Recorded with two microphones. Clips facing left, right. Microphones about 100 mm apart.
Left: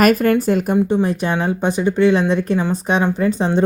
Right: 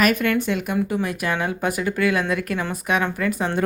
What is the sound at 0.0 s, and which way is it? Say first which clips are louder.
Speech: left 6 dB; 40° left (ahead or behind).